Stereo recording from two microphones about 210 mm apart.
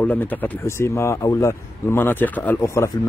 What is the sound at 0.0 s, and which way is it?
Speech, 10° left (ahead or behind).